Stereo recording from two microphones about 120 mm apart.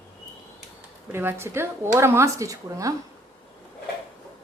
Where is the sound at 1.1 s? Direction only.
20° right (ahead or behind).